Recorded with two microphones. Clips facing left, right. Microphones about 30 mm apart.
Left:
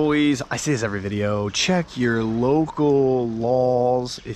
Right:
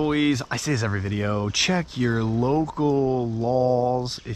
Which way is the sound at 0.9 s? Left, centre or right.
Centre.